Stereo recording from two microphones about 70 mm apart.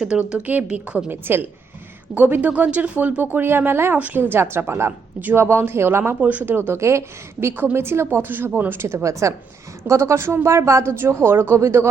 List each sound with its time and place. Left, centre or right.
0.0 s a woman's voice: centre
1.1 s speech: right
6.1 s speech: right
6.7 s speech: right
7.5 s speech: right